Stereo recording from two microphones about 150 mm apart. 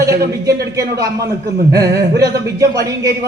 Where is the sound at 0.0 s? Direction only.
20° right (ahead or behind).